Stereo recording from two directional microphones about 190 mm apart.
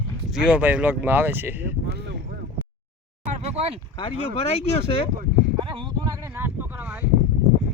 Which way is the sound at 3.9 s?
30° left (ahead or behind).